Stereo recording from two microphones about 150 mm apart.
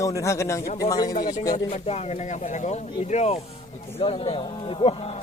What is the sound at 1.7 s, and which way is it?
Speech, 45° left (ahead or behind).